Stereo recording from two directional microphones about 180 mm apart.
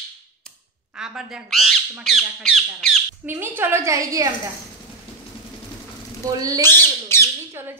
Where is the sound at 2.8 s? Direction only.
10° right (ahead or behind).